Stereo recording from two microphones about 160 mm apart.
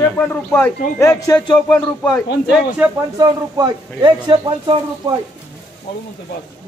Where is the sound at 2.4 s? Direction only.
5° right (ahead or behind).